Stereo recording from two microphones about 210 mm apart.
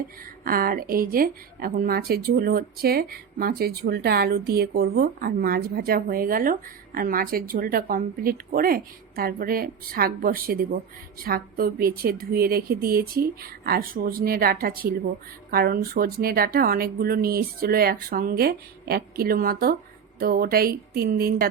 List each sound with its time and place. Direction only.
0.4 s speech: 45° right (ahead or behind)